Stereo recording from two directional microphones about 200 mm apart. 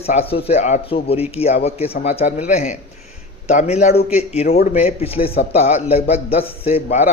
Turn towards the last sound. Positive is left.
turn(degrees=35)  # may be behind; listen again after turning